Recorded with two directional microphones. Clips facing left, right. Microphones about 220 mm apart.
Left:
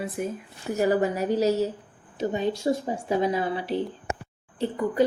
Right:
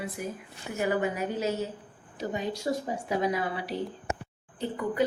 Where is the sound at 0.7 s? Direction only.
40° left (ahead or behind).